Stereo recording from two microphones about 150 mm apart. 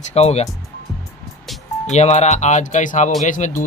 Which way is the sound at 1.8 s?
50° left (ahead or behind).